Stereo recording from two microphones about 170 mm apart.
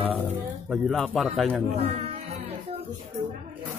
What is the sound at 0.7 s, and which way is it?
Speech, centre (ahead or behind).